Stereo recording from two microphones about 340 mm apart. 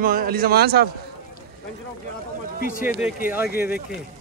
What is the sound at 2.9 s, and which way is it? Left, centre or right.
Speech, centre.